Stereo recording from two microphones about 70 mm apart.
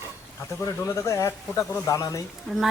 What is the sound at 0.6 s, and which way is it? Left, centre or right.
Speech, left.